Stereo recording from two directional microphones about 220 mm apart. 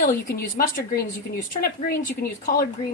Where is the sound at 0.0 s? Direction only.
40° left (ahead or behind).